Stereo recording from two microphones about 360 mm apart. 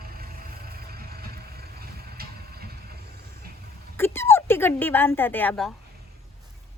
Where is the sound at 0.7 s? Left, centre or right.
Right.